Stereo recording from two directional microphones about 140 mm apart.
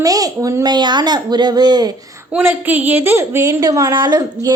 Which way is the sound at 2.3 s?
10° right (ahead or behind).